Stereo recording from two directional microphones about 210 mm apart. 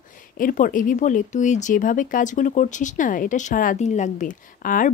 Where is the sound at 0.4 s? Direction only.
40° left (ahead or behind).